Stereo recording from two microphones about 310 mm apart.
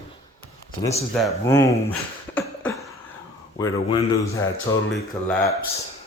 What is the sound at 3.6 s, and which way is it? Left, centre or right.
A man's voice, centre.